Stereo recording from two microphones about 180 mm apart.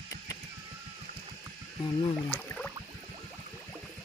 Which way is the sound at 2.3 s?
10° left (ahead or behind).